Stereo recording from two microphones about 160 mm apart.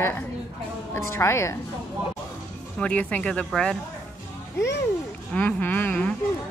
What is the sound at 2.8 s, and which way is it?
A woman's voice, 10° left (ahead or behind).